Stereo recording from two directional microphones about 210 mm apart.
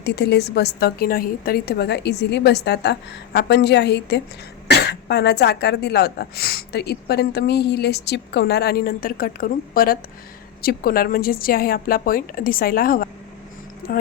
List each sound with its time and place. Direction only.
0.0 s speech: 55° left (ahead or behind)